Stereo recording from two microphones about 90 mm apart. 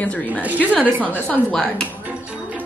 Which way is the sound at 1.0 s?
15° left (ahead or behind).